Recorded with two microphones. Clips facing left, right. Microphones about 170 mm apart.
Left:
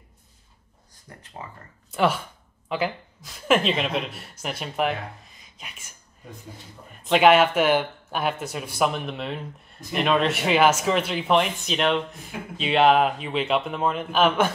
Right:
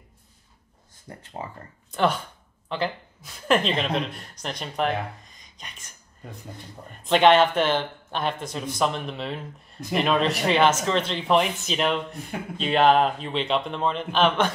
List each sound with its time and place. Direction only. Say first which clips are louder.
1.1 s speech: right 4 dB; 30° right (ahead or behind)
1.9 s speech: left 1 dB; 5° left (ahead or behind)
7.0 s speech: even; 5° left (ahead or behind)